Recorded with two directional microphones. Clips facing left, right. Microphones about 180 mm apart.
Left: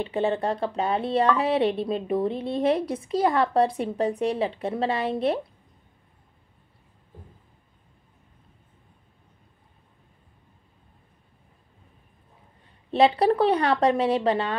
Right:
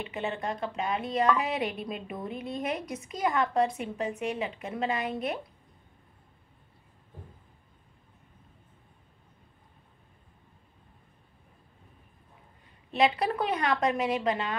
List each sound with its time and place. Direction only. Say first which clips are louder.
0.0 s a woman's voice: left 8 dB; 30° left (ahead or behind)
12.9 s a woman's voice: left 7 dB; 30° left (ahead or behind)